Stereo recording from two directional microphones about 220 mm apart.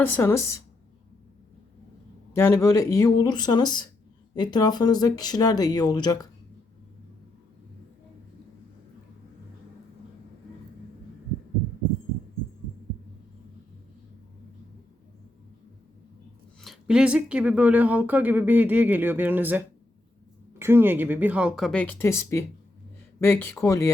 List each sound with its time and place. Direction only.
0.0 s speech: 10° left (ahead or behind)
2.3 s speech: 10° left (ahead or behind)
16.6 s speech: centre (ahead or behind)